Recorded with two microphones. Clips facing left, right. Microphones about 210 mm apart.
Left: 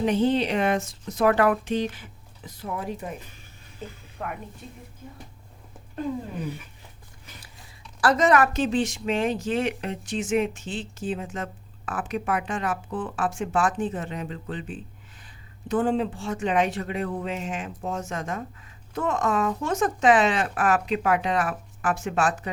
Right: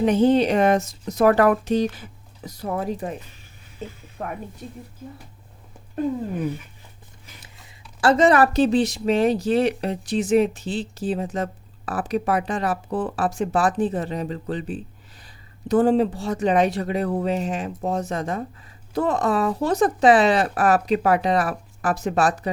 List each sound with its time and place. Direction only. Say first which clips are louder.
0.0 s speech: right 5 dB; 45° right (ahead or behind)
8.0 s speech: right 4 dB; 30° right (ahead or behind)